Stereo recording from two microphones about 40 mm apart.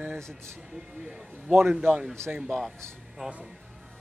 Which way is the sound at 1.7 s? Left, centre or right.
Right.